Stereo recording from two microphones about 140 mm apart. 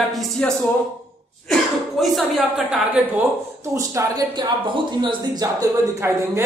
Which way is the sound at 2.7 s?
10° right (ahead or behind).